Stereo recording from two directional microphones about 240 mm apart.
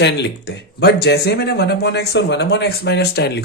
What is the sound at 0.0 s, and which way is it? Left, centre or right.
Speech, left.